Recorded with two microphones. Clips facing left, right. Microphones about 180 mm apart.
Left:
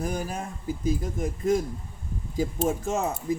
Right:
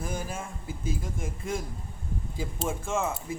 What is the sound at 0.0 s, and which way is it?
Speech, 40° left (ahead or behind).